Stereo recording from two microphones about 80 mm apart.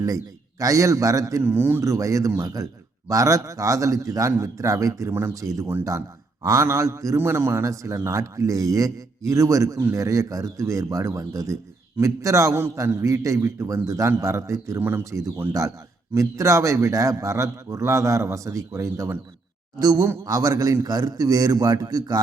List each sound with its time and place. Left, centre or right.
0.6 s a man's voice: right
1.4 s a man's voice: right
1.8 s a man's voice: right
14.8 s a man's voice: right
15.1 s a man's voice: right